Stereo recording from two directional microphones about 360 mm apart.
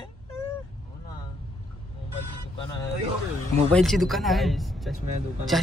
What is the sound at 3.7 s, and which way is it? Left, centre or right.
Speech, centre.